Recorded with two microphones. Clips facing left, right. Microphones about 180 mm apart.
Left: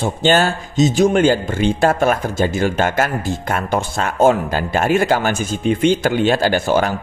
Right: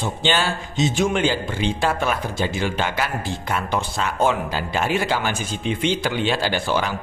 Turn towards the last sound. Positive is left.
turn(degrees=45)  # may be behind; listen again after turning